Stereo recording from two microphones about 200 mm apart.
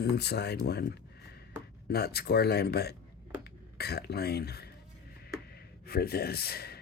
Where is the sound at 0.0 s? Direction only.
55° left (ahead or behind).